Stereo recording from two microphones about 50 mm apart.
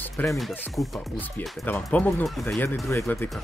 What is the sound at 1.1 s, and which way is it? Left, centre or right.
Speech, left.